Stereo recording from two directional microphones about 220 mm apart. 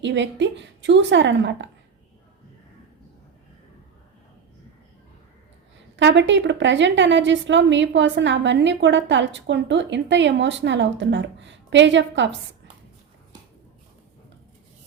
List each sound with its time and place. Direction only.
0.0 s a woman's voice: 55° right (ahead or behind)
6.0 s a woman's voice: 55° right (ahead or behind)